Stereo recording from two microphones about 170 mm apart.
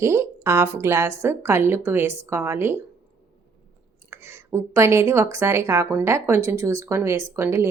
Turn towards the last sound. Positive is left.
turn(degrees=-15)  # may be behind; listen again after turning